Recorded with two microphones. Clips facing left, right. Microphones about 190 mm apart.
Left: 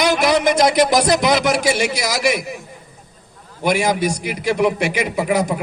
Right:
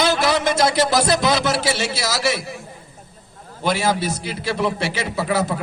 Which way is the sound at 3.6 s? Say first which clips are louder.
Left 3 dB; 15° left (ahead or behind).